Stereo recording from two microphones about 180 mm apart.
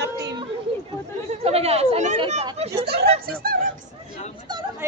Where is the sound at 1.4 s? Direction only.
35° right (ahead or behind).